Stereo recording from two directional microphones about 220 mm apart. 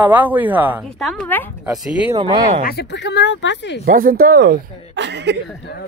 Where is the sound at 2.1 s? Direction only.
25° right (ahead or behind).